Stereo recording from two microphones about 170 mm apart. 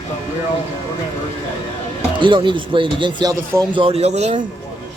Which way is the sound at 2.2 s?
30° right (ahead or behind).